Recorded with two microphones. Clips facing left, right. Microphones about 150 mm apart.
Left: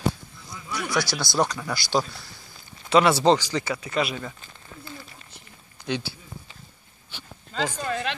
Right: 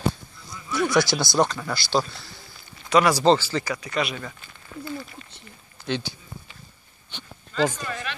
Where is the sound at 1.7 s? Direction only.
15° left (ahead or behind).